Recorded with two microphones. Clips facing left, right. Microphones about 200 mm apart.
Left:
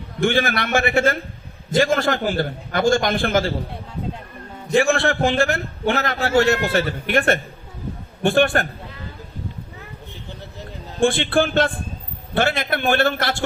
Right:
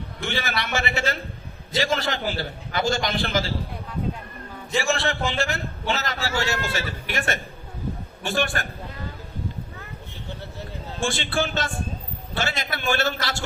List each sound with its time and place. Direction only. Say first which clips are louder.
0.2 s a man's voice: left 9 dB; 50° left (ahead or behind)
4.7 s a man's voice: left 7 dB; 55° left (ahead or behind)
11.0 s a man's voice: left 8 dB; 55° left (ahead or behind)